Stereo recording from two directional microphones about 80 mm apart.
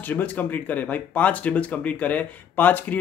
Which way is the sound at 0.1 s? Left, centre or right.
Left.